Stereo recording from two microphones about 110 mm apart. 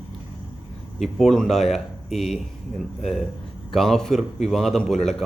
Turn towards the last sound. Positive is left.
turn(degrees=5)  # may be behind; listen again after turning